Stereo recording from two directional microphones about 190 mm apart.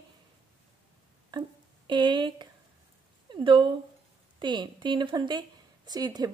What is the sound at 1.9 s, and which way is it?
A woman's voice, 25° right (ahead or behind).